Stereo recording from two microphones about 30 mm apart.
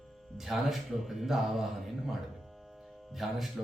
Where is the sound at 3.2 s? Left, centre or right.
Centre.